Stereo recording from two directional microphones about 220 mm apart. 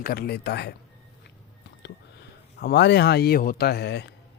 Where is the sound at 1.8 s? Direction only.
50° left (ahead or behind).